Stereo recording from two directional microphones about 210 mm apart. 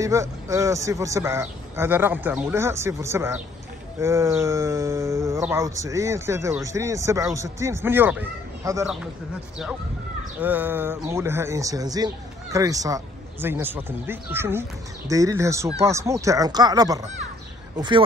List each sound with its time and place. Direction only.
0.0 s speech: 15° right (ahead or behind)
10.4 s speech: 10° right (ahead or behind)